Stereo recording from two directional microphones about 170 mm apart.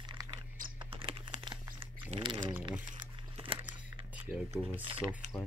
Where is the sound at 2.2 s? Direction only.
25° right (ahead or behind).